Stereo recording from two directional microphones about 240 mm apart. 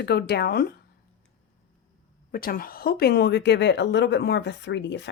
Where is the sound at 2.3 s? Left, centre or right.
Left.